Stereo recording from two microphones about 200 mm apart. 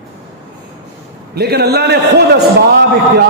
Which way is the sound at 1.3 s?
55° right (ahead or behind).